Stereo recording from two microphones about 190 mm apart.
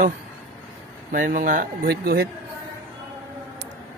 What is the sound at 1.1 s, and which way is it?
Speech, 45° right (ahead or behind).